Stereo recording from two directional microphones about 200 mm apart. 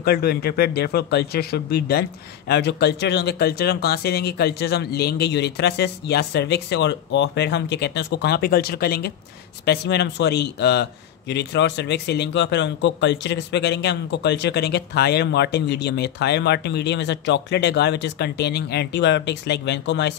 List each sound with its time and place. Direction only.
0.0 s a man's voice: 50° left (ahead or behind)